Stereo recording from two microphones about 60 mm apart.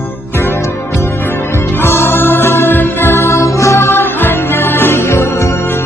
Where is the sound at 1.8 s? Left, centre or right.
Left.